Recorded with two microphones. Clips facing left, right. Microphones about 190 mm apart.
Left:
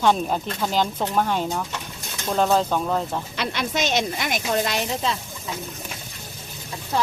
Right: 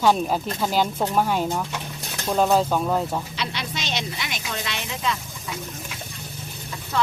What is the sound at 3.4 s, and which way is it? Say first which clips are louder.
Speech: left 5 dB; 50° left (ahead or behind).